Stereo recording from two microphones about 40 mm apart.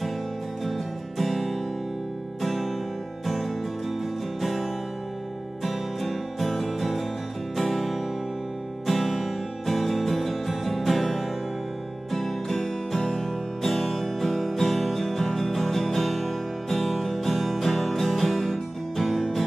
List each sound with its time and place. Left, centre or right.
0.7 s music: centre